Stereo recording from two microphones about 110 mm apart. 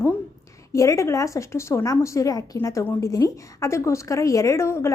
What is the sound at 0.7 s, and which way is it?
A woman's voice, 30° left (ahead or behind).